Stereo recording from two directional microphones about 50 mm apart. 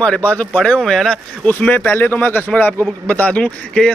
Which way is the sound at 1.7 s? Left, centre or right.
Left.